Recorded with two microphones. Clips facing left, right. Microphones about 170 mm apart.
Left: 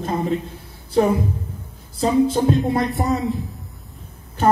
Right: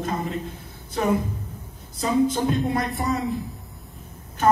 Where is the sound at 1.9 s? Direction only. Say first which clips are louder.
Left 4 dB; 30° left (ahead or behind).